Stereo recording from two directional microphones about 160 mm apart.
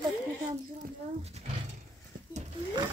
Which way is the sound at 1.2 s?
40° right (ahead or behind).